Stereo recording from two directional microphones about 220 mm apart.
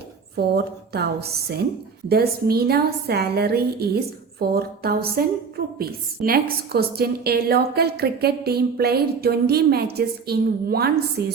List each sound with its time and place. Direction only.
0.3 s a woman's voice: 45° right (ahead or behind)